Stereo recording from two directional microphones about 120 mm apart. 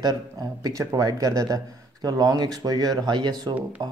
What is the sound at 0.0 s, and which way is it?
A man's voice, 35° right (ahead or behind).